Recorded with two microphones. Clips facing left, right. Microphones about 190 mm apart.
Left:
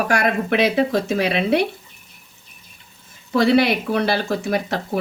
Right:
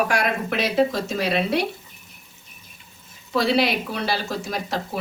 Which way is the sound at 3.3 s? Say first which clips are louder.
Left 5 dB; 55° left (ahead or behind).